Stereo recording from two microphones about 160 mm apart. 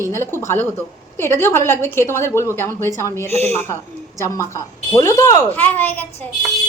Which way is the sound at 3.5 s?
15° left (ahead or behind).